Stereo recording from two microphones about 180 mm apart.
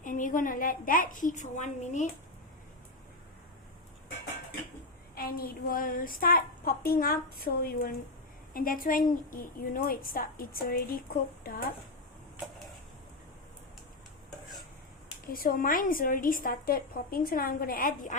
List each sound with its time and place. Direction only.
0.0 s a woman's voice: 45° left (ahead or behind)
5.1 s a woman's voice: 55° left (ahead or behind)
15.3 s a woman's voice: 50° left (ahead or behind)